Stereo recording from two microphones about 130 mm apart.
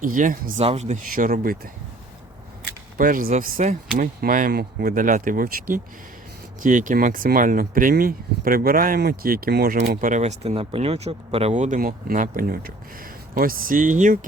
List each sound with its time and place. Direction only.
0.0 s speech: 90° right
0.6 s speech: 55° right (ahead or behind); by 1.7 s 90° right
3.0 s speech: 90° right; by 3.8 s 70° right (ahead or behind)
3.9 s speech: 90° right; by 11.5 s 50° right (ahead or behind)
11.5 s speech: 75° right (ahead or behind)